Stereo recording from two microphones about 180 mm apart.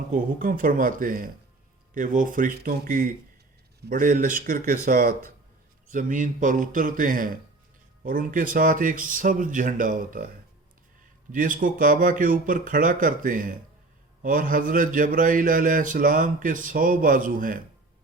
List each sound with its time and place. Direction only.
0.1 s a man's voice: 50° right (ahead or behind)
11.3 s a man's voice: 50° right (ahead or behind)